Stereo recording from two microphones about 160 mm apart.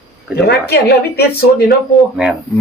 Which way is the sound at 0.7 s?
85° left.